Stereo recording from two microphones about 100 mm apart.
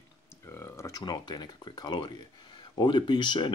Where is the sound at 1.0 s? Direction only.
45° left (ahead or behind).